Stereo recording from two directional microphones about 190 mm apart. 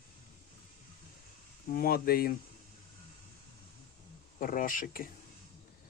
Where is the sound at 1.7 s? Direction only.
50° left (ahead or behind).